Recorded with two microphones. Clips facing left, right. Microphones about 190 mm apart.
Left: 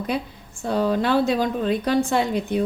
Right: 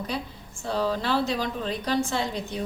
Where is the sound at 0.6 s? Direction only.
55° left (ahead or behind).